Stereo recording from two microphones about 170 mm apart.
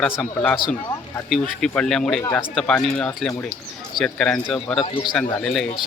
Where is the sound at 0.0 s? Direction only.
5° left (ahead or behind).